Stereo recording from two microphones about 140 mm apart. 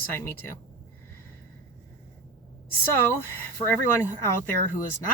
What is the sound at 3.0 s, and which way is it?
Speech, 15° left (ahead or behind).